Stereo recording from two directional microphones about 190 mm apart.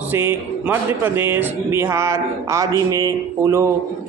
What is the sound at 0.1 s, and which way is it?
Speech, 10° right (ahead or behind).